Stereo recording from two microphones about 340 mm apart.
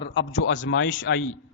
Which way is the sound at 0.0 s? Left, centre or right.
Left.